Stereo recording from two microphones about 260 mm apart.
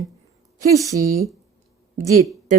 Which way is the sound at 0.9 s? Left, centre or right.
Right.